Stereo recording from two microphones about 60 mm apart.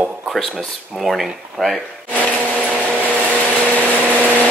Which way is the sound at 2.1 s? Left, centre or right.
Right.